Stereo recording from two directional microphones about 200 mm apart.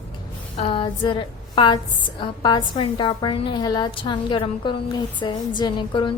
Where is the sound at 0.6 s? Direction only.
25° left (ahead or behind).